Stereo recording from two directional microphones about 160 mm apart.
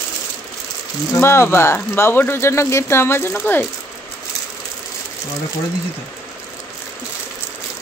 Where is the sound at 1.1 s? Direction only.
15° left (ahead or behind).